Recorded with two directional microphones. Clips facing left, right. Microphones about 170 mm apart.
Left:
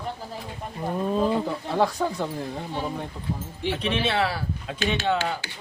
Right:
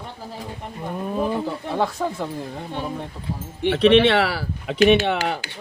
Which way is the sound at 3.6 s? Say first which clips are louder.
Right 11 dB; 75° right (ahead or behind).